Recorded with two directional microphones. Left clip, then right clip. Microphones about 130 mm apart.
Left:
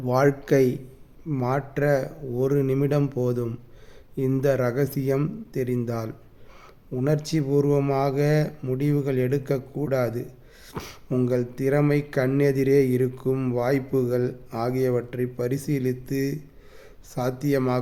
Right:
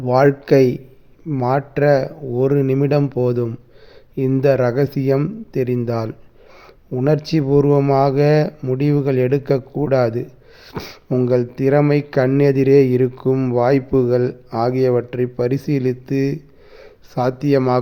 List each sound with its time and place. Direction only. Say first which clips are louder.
0.0 s speech: right 7 dB; 20° right (ahead or behind); by 10.2 s 40° right (ahead or behind)
10.7 s speech: right 7 dB; 25° right (ahead or behind)
11.3 s speech: right 9 dB; 35° right (ahead or behind)